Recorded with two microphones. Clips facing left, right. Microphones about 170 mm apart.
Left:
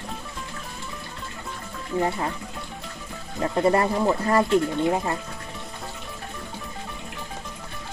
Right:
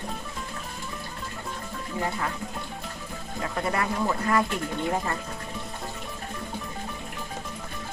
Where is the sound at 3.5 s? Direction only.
30° left (ahead or behind).